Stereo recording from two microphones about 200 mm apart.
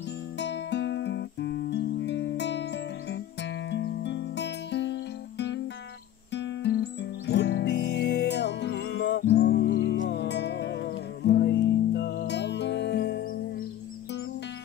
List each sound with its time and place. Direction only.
0.4 s music: 60° left (ahead or behind)